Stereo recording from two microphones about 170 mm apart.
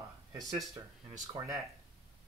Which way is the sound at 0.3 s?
20° right (ahead or behind).